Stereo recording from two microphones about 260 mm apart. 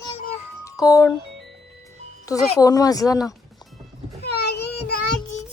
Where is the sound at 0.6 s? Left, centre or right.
Centre.